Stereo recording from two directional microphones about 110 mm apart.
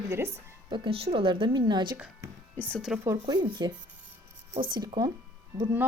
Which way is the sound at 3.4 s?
45° right (ahead or behind).